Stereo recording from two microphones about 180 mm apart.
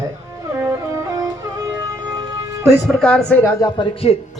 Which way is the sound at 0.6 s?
15° right (ahead or behind).